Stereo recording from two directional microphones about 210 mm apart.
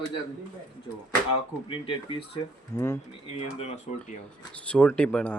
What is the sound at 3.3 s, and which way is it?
Speech, 30° left (ahead or behind).